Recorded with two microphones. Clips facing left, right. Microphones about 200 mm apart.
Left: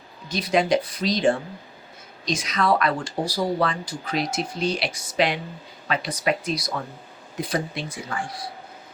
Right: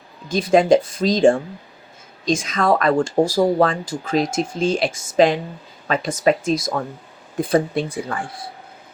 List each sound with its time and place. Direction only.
0.3 s speech: 50° right (ahead or behind)